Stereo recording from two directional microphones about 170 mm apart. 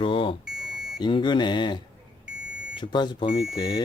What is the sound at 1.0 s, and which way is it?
Speech, 25° left (ahead or behind).